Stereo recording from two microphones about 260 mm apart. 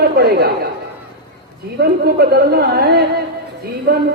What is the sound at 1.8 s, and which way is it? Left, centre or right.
A woman's voice, right.